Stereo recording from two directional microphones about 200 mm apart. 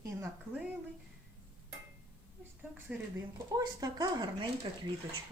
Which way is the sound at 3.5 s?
20° right (ahead or behind).